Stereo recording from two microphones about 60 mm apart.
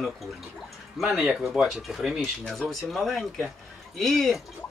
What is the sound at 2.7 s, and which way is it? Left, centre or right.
Speech, centre.